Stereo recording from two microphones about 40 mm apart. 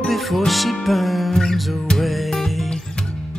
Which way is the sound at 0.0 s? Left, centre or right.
Centre.